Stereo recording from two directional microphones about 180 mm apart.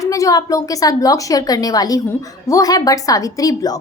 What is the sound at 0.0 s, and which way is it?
A woman's voice, 20° left (ahead or behind).